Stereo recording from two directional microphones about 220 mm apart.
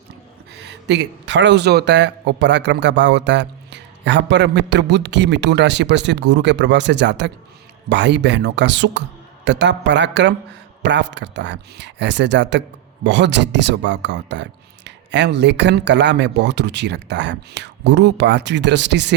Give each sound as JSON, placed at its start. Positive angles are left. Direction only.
{"t": 0.5, "sound": "a man's voice", "side_deg": -50}